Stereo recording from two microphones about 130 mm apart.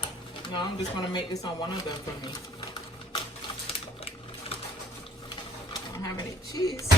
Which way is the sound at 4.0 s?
45° left (ahead or behind).